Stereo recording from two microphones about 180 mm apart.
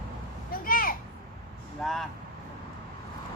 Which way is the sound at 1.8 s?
Centre (ahead or behind).